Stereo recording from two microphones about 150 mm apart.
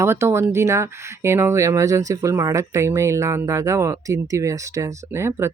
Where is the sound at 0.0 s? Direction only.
15° right (ahead or behind).